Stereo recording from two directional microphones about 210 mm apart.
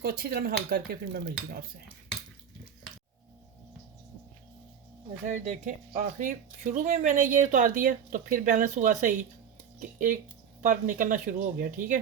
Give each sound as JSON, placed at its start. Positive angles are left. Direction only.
{"t": 0.0, "sound": "speech", "side_deg": -50}
{"t": 5.2, "sound": "speech", "side_deg": -35}
{"t": 10.6, "sound": "speech", "side_deg": -35}